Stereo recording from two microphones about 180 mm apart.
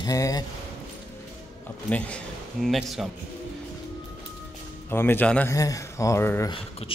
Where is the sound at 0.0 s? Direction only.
20° left (ahead or behind).